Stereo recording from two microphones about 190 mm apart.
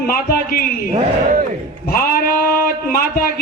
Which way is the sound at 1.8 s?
50° left (ahead or behind).